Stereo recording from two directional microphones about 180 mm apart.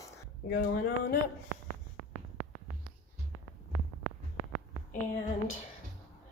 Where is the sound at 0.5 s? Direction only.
55° left (ahead or behind).